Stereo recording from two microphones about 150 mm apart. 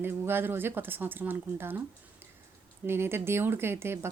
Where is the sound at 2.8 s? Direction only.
15° right (ahead or behind).